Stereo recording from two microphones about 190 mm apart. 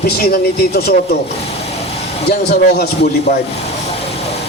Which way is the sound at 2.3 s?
60° left (ahead or behind).